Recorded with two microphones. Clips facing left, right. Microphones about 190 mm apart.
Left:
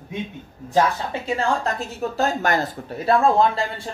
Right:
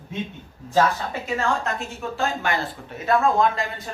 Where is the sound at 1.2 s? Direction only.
35° left (ahead or behind).